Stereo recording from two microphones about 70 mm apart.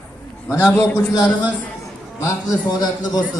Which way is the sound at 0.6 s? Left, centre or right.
Centre.